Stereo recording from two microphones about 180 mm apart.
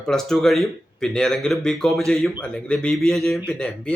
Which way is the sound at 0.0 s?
5° left (ahead or behind).